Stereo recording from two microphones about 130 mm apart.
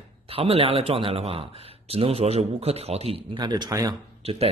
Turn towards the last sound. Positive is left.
turn(degrees=-50)  # may be behind; listen again after turning